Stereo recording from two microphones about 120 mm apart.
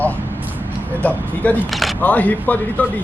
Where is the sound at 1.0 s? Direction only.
10° left (ahead or behind).